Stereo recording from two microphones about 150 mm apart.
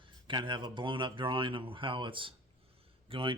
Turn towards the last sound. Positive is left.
turn(degrees=-35)  # may be behind; listen again after turning